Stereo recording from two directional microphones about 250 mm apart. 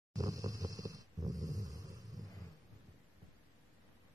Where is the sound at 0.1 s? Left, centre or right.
Centre.